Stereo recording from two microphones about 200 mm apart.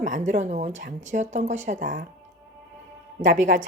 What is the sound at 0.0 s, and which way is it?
Speech, 35° right (ahead or behind).